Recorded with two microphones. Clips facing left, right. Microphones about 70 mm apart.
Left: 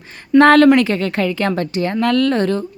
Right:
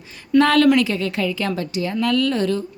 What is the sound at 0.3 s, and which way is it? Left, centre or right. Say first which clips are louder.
A woman's voice: left 5 dB; left.